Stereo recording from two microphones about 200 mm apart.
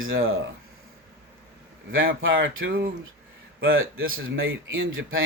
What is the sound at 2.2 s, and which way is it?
Speech, 75° right (ahead or behind).